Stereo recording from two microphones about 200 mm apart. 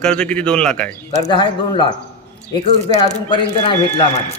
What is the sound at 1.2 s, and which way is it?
Speech, 25° left (ahead or behind).